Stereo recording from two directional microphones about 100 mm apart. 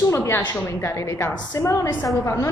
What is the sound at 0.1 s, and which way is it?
Speech, 30° left (ahead or behind).